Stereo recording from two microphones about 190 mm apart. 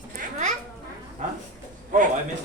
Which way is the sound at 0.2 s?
40° right (ahead or behind).